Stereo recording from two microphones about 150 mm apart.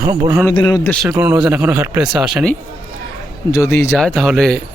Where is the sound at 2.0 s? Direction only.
5° right (ahead or behind).